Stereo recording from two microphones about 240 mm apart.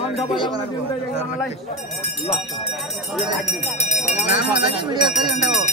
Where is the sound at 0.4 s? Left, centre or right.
Left.